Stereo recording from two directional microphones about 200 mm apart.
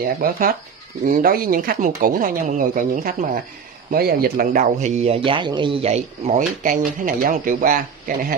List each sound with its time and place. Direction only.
0.0 s speech: 45° right (ahead or behind)